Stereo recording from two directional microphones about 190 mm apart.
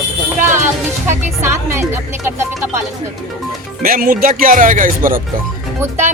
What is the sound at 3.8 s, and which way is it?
Speech, 50° right (ahead or behind).